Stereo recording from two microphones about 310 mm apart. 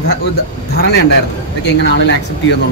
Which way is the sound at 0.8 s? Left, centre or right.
Left.